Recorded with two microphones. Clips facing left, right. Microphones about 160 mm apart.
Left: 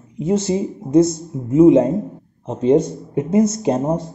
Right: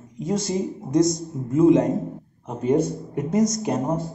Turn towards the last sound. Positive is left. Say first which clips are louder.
# left 5 dB
turn(degrees=25)  # may be behind; listen again after turning